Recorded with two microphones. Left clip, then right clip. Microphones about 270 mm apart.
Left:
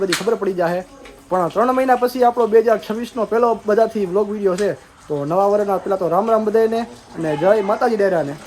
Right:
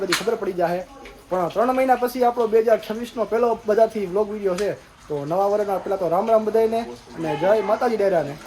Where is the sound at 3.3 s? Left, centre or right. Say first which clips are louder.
Left 3 dB; centre.